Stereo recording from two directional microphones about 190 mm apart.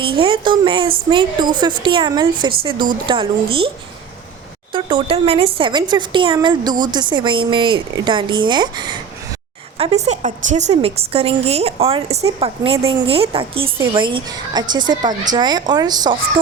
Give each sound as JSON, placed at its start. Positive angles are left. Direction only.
{"t": 0.0, "sound": "speech", "side_deg": -25}
{"t": 4.7, "sound": "speech", "side_deg": -25}
{"t": 9.7, "sound": "a woman's voice", "side_deg": -35}